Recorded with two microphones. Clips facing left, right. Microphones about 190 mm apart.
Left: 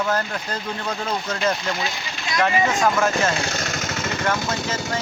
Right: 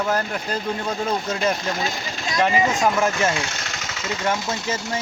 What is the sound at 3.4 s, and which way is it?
Vehicle, 40° left (ahead or behind).